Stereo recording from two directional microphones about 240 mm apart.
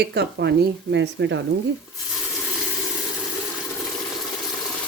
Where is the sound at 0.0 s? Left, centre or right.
Right.